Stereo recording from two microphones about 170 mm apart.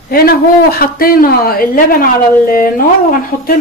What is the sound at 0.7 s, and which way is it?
A woman's voice, 60° left (ahead or behind).